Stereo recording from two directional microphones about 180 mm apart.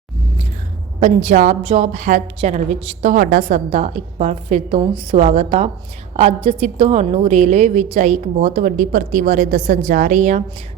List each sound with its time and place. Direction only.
0.9 s a woman's voice: 40° right (ahead or behind)